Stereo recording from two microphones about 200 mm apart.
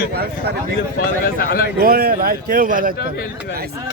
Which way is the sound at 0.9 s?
45° left (ahead or behind).